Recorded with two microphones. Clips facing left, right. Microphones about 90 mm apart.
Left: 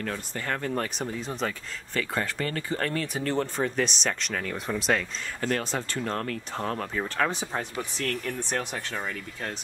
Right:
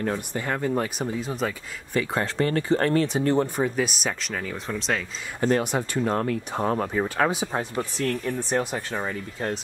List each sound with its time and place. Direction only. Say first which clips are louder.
0.0 s speech: right 5 dB; 20° right (ahead or behind)
2.0 s speech: right 5 dB; 25° right (ahead or behind)
3.2 s speech: right 5 dB; 15° right (ahead or behind); by 5.0 s 5° left (ahead or behind)
5.4 s speech: right 6 dB; 15° right (ahead or behind)